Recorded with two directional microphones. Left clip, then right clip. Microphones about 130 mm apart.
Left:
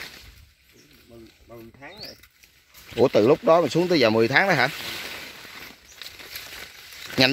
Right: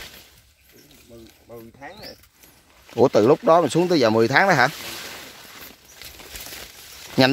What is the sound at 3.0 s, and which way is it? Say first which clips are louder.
Speech: right 2 dB; 10° right (ahead or behind).